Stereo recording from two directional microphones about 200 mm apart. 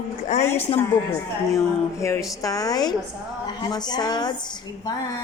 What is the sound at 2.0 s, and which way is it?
A woman's voice, 15° left (ahead or behind).